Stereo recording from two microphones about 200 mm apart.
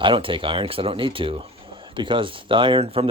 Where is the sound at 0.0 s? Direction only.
25° right (ahead or behind).